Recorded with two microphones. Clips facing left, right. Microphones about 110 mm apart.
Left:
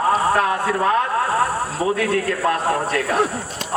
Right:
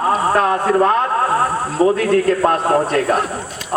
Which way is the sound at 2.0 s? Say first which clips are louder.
Right 6 dB; 40° right (ahead or behind).